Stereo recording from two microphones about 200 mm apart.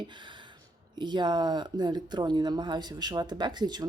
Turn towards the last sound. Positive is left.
turn(degrees=-20)  # may be behind; listen again after turning